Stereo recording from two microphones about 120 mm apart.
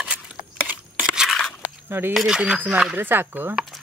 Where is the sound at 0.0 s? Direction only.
10° right (ahead or behind).